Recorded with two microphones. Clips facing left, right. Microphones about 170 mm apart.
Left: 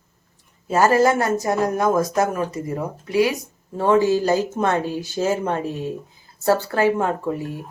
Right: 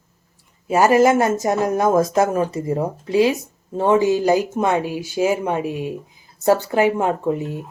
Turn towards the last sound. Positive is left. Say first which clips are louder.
# right 3 dB
turn(degrees=-20)  # may be behind; listen again after turning